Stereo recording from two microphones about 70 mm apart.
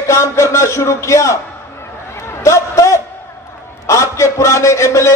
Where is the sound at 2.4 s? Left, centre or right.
Left.